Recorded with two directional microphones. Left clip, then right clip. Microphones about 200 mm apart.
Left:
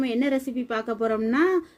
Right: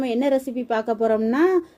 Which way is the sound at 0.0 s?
5° right (ahead or behind).